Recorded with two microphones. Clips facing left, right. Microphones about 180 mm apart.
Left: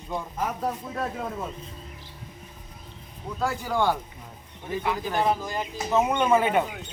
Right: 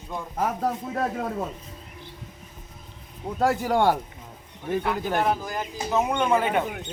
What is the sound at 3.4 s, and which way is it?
Speech, 70° right (ahead or behind).